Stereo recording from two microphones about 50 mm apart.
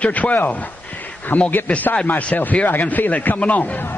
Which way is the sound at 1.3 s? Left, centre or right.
Left.